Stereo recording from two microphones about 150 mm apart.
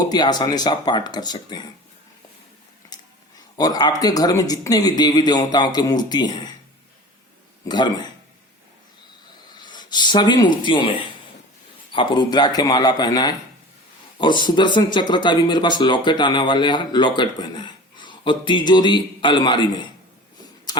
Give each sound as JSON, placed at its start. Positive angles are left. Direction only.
{"t": 0.0, "sound": "speech", "side_deg": 25}
{"t": 2.9, "sound": "speech", "side_deg": 25}
{"t": 7.7, "sound": "speech", "side_deg": 30}
{"t": 9.5, "sound": "speech", "side_deg": 30}
{"t": 20.7, "sound": "a sound", "side_deg": 30}